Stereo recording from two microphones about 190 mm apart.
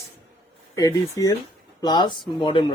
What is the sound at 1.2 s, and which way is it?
Speech, 20° left (ahead or behind).